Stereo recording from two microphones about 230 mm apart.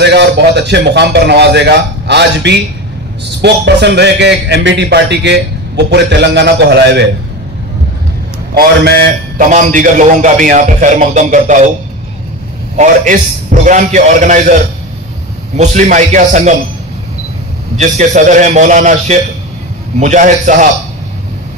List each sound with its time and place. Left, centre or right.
0.0 s a man's voice: right
9.4 s a man's voice: right
12.7 s a man's voice: right
15.5 s a man's voice: right
17.7 s a man's voice: right